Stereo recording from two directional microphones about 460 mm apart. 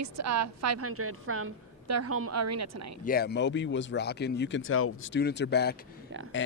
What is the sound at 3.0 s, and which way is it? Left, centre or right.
Speech, centre.